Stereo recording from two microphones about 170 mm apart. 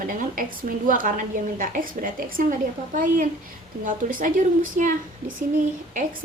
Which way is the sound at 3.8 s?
50° right (ahead or behind).